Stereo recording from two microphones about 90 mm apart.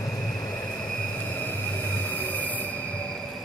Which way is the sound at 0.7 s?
10° left (ahead or behind).